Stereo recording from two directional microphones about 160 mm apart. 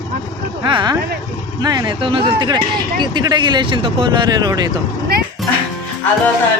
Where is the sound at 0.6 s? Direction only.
30° right (ahead or behind).